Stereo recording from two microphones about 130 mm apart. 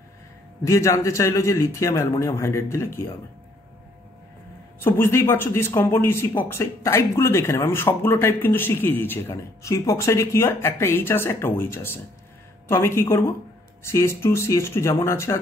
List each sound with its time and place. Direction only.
0.7 s speech: 20° left (ahead or behind)
4.8 s a man's voice: 15° left (ahead or behind)